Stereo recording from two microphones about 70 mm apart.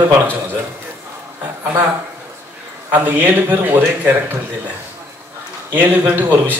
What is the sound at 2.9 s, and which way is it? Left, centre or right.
A man's voice, right.